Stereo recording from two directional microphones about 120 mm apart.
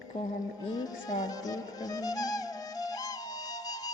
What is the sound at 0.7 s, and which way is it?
Music, 35° left (ahead or behind).